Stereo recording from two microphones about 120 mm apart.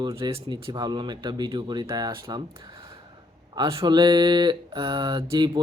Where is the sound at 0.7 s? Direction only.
35° right (ahead or behind).